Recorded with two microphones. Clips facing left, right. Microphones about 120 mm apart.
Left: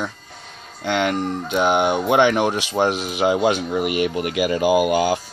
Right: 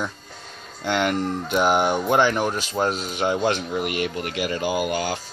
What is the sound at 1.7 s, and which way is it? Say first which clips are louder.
Speech: left 3 dB; 20° left (ahead or behind).